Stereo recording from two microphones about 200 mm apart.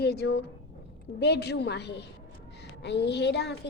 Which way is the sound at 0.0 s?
55° left (ahead or behind).